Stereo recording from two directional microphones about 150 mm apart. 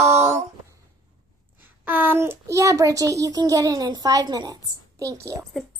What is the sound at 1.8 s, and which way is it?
A child's voice, 15° right (ahead or behind).